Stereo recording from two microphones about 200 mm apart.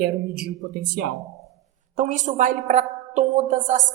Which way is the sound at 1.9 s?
40° right (ahead or behind).